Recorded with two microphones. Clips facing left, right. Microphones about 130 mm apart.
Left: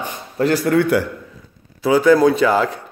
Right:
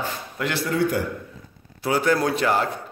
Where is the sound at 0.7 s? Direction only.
60° left (ahead or behind).